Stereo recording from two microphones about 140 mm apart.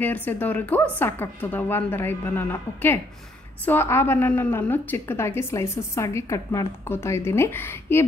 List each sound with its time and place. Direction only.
0.0 s a woman's voice: 15° left (ahead or behind)